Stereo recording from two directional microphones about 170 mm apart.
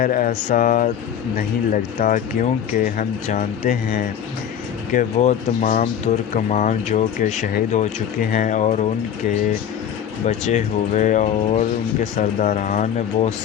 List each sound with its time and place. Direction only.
0.0 s speech: 55° left (ahead or behind)
10.2 s speech: 45° left (ahead or behind)